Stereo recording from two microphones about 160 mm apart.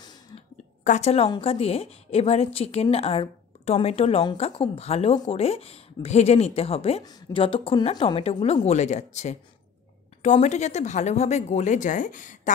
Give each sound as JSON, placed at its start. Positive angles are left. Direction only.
{"t": 0.0, "sound": "a sound", "side_deg": 25}
{"t": 0.8, "sound": "a woman's voice", "side_deg": 45}
{"t": 8.6, "sound": "speech", "side_deg": 45}